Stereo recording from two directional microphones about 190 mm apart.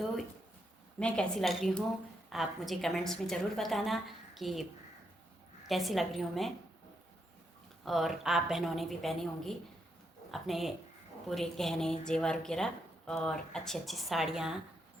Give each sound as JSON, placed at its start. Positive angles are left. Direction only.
{"t": 0.9, "sound": "a woman's voice", "side_deg": 5}
{"t": 5.6, "sound": "a woman's voice", "side_deg": 0}
{"t": 7.9, "sound": "a woman's voice", "side_deg": 0}